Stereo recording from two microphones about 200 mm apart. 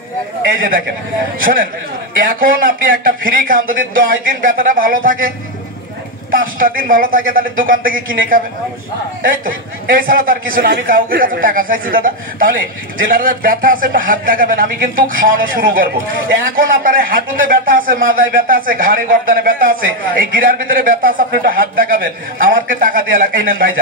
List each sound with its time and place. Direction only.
0.4 s speech: 45° right (ahead or behind)
6.3 s speech: 45° right (ahead or behind)
9.8 s speech: 45° right (ahead or behind)